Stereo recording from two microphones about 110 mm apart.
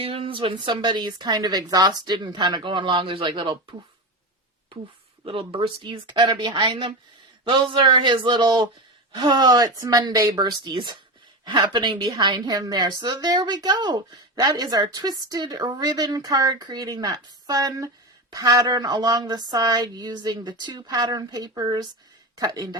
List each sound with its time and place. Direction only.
0.0 s a woman's voice: 55° right (ahead or behind)
5.2 s a woman's voice: 55° right (ahead or behind); by 22.8 s 35° right (ahead or behind)